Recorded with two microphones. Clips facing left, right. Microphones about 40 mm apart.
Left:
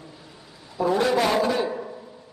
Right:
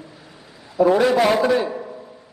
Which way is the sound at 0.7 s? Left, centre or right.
Right.